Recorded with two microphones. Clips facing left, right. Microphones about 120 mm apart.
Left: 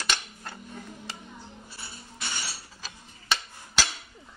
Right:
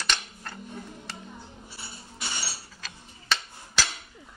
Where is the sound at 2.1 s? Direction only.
15° right (ahead or behind).